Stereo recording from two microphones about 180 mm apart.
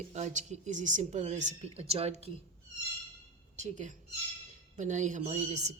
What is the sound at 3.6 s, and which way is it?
Speech, 45° right (ahead or behind).